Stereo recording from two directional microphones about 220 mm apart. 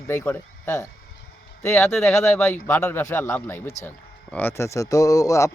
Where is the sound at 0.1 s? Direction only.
10° left (ahead or behind).